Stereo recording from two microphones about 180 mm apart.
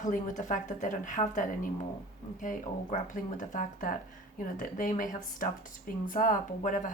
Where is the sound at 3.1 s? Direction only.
45° left (ahead or behind).